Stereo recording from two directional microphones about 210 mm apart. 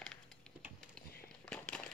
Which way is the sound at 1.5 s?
5° left (ahead or behind).